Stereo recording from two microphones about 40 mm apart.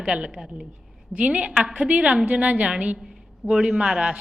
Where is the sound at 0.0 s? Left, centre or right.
Right.